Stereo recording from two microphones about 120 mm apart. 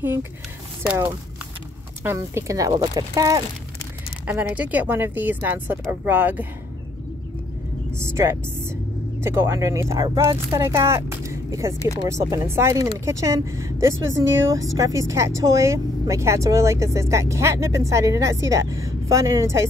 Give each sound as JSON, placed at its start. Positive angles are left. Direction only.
{"t": 0.0, "sound": "speech", "side_deg": -20}
{"t": 2.1, "sound": "speech", "side_deg": -25}
{"t": 4.3, "sound": "speech", "side_deg": -15}
{"t": 8.0, "sound": "speech", "side_deg": -20}